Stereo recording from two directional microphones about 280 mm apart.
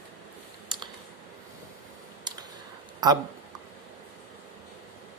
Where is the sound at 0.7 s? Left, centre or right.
Centre.